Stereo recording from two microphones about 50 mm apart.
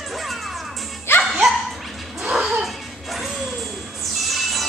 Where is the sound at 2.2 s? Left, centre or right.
Centre.